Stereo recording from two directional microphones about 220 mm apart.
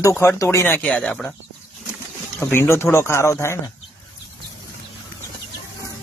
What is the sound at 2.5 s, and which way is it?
Speech, 10° left (ahead or behind).